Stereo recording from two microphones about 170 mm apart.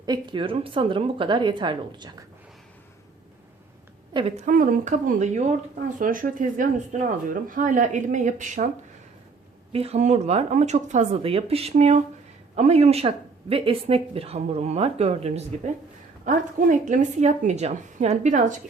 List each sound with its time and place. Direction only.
0.0 s speech: 25° right (ahead or behind)
4.4 s speech: 50° right (ahead or behind)
9.7 s speech: 35° right (ahead or behind)
16.2 s speech: 50° right (ahead or behind)